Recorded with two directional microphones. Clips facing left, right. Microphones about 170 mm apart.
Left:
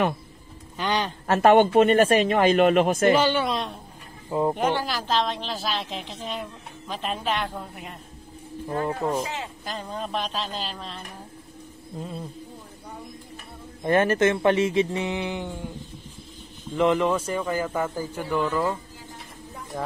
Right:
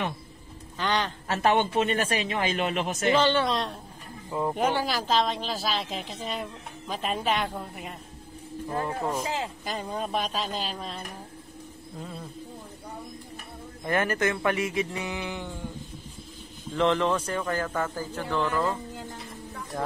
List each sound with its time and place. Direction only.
0.7 s speech: 15° left (ahead or behind)
1.2 s speech: 50° left (ahead or behind)
3.2 s speech: 5° left (ahead or behind)
4.3 s speech: 25° left (ahead or behind)
4.6 s speech: 5° right (ahead or behind)
8.6 s speech: 30° left (ahead or behind)
9.7 s speech: 10° right (ahead or behind)
13.8 s speech: 25° left (ahead or behind)
16.7 s speech: 5° left (ahead or behind)